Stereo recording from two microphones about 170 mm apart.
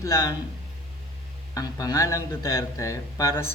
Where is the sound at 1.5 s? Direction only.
20° left (ahead or behind).